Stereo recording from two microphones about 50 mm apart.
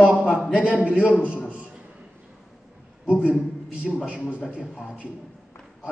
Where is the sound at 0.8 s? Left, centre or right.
Right.